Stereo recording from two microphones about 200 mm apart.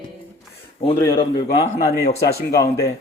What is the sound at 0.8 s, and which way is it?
Speech, 25° left (ahead or behind).